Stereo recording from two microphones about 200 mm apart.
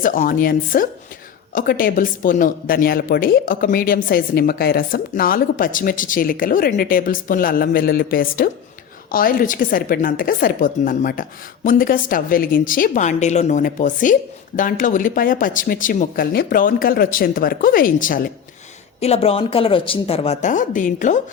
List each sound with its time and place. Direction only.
0.0 s speech: 45° left (ahead or behind)
18.9 s speech: 30° left (ahead or behind)